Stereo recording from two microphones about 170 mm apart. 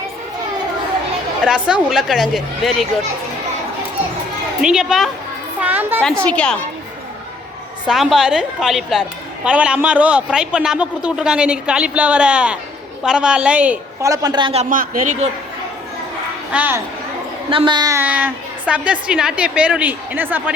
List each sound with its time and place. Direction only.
1.5 s speech: 5° right (ahead or behind)
4.6 s speech: 5° right (ahead or behind)
5.5 s children playing: 10° right (ahead or behind)
6.2 s a woman's voice: 5° left (ahead or behind)
7.9 s a woman's voice: 5° right (ahead or behind)
14.0 s a woman's voice: 20° right (ahead or behind)
14.6 s speech: 50° right (ahead or behind)
16.5 s a woman's voice: 10° right (ahead or behind)
17.5 s a woman's voice: 30° right (ahead or behind)
18.0 s a woman's voice: 10° right (ahead or behind)